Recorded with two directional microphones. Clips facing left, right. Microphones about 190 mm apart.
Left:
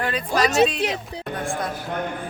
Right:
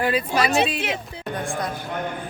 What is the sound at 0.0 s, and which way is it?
Speech, 5° right (ahead or behind).